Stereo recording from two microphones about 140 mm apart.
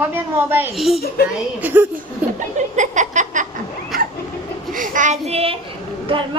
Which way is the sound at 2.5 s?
60° right (ahead or behind).